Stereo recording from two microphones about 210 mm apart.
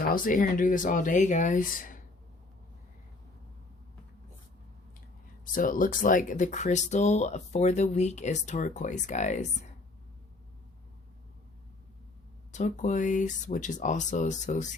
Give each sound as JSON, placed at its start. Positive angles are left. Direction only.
{"t": 0.0, "sound": "speech", "side_deg": 40}
{"t": 5.5, "sound": "speech", "side_deg": 40}
{"t": 12.5, "sound": "speech", "side_deg": 35}